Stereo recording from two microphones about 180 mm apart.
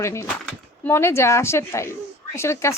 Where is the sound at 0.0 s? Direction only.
15° left (ahead or behind).